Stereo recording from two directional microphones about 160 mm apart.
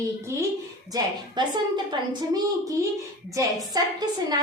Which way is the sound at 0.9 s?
30° right (ahead or behind).